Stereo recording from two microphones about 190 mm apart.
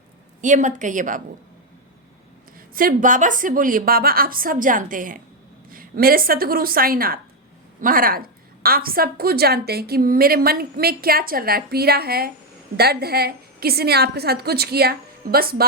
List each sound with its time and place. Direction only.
0.4 s speech: 40° right (ahead or behind)
2.6 s a woman's voice: 50° right (ahead or behind)